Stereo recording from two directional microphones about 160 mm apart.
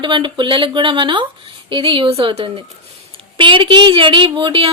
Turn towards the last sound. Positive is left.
turn(degrees=-35)  # may be behind; listen again after turning